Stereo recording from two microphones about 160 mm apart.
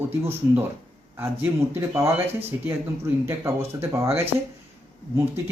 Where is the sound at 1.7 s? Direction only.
15° right (ahead or behind).